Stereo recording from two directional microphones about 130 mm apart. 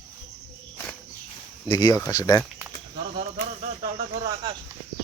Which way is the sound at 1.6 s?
30° left (ahead or behind).